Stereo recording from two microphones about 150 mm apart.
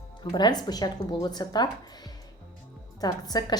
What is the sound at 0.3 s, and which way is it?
A woman's voice, 30° left (ahead or behind).